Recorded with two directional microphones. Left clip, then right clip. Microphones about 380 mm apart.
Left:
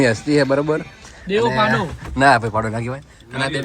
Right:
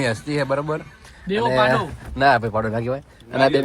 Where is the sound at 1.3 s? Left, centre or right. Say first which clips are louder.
Left 4 dB; centre.